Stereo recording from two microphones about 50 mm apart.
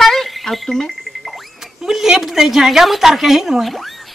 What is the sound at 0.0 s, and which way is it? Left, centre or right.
Music, centre.